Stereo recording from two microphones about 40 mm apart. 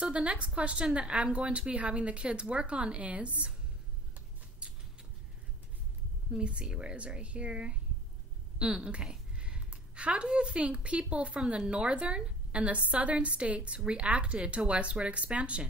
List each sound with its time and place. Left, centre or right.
0.0 s a woman's voice: right
6.3 s a woman's voice: right